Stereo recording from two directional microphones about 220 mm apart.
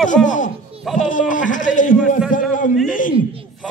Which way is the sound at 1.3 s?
35° left (ahead or behind).